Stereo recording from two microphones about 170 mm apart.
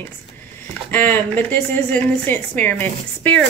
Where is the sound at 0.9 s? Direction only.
10° left (ahead or behind).